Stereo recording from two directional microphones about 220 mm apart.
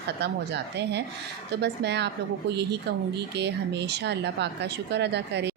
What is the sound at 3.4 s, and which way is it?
Speech, 50° right (ahead or behind).